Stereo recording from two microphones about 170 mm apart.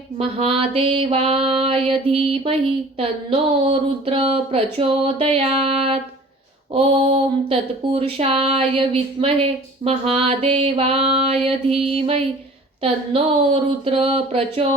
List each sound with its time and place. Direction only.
0.2 s speech: 35° right (ahead or behind)